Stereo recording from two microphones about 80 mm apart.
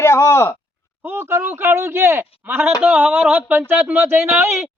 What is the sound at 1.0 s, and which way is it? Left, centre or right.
A man's voice, right.